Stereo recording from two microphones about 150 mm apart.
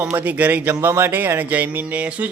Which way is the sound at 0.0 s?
10° right (ahead or behind).